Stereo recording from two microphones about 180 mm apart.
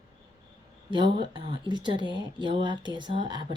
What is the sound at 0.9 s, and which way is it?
Speech, 25° right (ahead or behind).